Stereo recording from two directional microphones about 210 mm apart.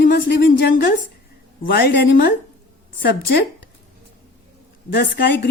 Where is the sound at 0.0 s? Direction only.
50° left (ahead or behind).